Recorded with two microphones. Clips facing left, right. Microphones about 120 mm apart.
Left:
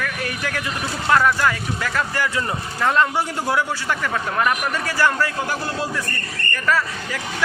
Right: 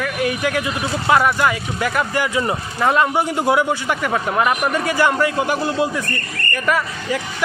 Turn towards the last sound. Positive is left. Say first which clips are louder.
# right 2 dB
turn(degrees=-15)  # may be behind; listen again after turning